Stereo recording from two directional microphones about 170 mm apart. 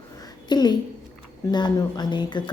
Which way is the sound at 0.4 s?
25° left (ahead or behind).